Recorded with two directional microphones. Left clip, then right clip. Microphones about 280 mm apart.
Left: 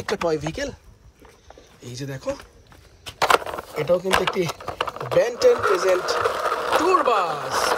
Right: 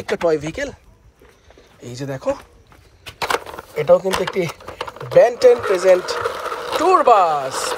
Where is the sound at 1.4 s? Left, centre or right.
Centre.